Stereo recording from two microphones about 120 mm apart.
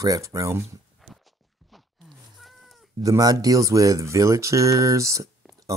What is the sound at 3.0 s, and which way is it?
Speech, 30° right (ahead or behind).